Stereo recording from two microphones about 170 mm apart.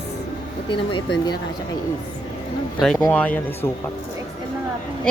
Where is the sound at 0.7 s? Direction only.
30° left (ahead or behind).